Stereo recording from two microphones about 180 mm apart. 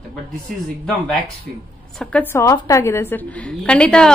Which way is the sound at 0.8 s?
5° left (ahead or behind).